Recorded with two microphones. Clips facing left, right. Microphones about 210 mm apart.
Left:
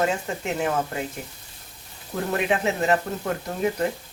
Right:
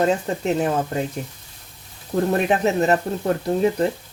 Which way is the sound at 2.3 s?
35° right (ahead or behind).